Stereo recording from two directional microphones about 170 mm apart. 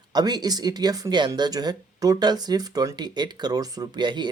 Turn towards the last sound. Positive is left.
turn(degrees=-25)  # may be behind; listen again after turning